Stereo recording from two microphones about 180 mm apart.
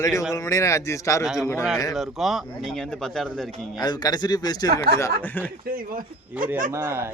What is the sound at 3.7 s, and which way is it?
Speech, 25° left (ahead or behind).